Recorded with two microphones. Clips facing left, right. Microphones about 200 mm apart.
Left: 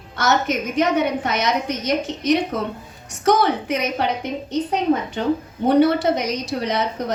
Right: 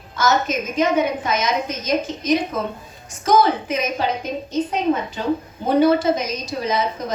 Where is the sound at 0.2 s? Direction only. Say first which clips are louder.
Even; 70° left (ahead or behind).